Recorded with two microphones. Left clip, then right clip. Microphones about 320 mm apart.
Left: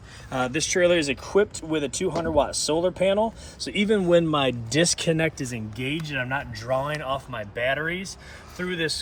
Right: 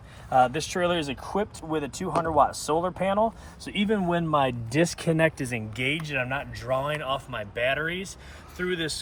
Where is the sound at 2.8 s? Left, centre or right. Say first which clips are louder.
Left 4 dB; centre.